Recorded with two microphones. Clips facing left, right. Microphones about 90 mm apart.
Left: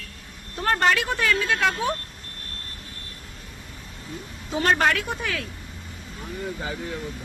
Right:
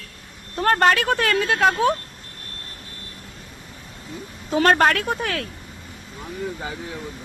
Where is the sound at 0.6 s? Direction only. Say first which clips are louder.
Right 4 dB; 45° right (ahead or behind).